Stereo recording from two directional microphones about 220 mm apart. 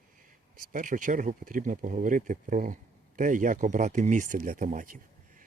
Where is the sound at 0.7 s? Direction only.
35° right (ahead or behind).